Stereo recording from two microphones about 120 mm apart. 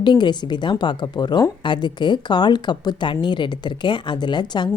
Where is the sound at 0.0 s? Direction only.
40° left (ahead or behind).